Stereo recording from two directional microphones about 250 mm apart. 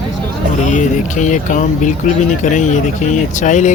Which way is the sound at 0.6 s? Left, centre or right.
Left.